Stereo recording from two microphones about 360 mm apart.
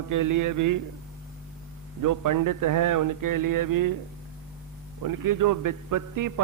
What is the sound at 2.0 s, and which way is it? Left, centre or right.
A man's voice, right.